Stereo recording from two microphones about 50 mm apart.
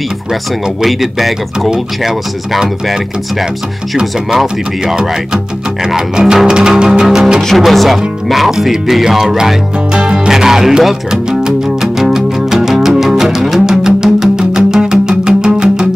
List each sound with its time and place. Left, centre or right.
0.8 s speech: centre
7.4 s speech: centre
9.9 s music: centre